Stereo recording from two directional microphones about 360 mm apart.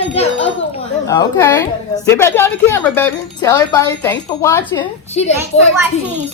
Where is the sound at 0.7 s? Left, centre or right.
Centre.